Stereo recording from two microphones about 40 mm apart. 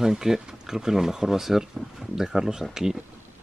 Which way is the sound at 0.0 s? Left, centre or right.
Centre.